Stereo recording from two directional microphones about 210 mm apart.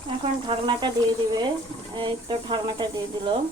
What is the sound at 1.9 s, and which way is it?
Speech, 20° right (ahead or behind).